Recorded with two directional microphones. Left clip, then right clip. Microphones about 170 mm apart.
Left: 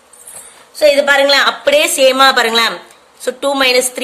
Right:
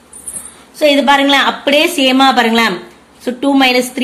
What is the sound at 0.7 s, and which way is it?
A woman's voice, 25° left (ahead or behind).